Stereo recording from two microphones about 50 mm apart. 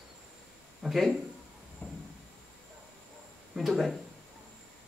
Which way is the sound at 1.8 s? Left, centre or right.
Left.